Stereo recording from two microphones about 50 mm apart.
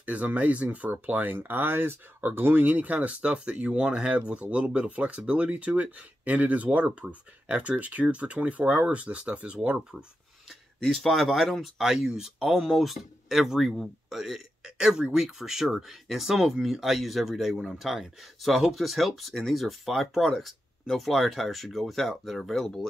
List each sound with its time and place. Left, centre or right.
0.0 s speech: right; by 10.0 s centre
10.8 s speech: centre
11.8 s speech: centre
14.6 s a sound: centre
15.1 s speech: centre